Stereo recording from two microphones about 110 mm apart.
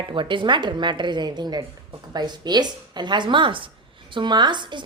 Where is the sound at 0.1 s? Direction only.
50° right (ahead or behind).